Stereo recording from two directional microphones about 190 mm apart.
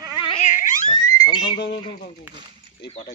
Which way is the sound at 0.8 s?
25° left (ahead or behind).